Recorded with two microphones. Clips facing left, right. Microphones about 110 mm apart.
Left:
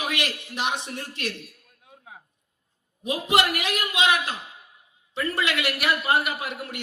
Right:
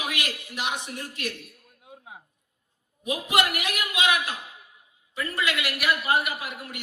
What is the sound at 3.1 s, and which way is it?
Speech, 30° left (ahead or behind).